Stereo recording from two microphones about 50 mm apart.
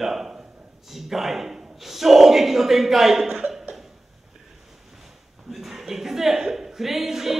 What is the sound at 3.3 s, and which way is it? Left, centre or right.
Cough, centre.